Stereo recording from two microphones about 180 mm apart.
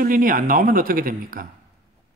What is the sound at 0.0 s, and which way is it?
Speech, 50° right (ahead or behind).